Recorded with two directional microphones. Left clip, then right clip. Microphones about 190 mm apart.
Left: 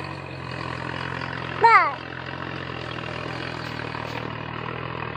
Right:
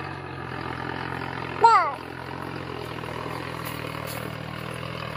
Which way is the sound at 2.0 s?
45° left (ahead or behind).